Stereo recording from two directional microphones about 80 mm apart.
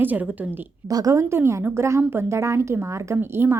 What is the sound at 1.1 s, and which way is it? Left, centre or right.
A woman's voice, right.